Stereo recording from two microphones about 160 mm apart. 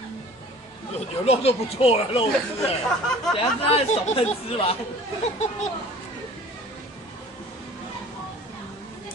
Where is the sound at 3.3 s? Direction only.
35° left (ahead or behind).